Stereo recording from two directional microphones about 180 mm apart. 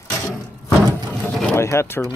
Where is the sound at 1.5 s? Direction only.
15° left (ahead or behind).